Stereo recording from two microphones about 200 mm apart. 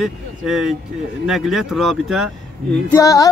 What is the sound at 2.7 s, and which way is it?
Female singing, 15° left (ahead or behind).